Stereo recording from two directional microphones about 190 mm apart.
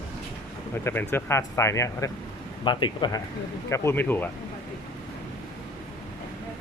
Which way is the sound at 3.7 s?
10° left (ahead or behind).